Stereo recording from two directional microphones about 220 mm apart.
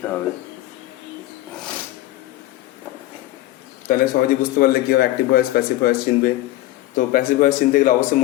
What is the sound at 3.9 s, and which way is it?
Speech, 40° left (ahead or behind).